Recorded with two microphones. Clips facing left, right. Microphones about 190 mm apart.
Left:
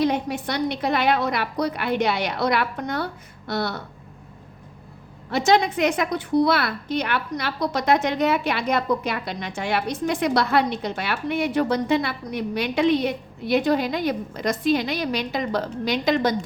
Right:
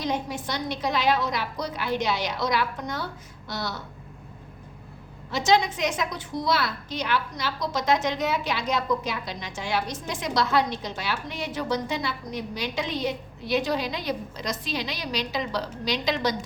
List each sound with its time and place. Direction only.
0.0 s a woman's voice: 60° left (ahead or behind)
5.3 s a woman's voice: 60° left (ahead or behind)